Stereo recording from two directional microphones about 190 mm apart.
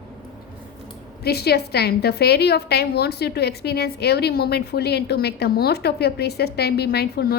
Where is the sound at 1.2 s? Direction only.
55° left (ahead or behind).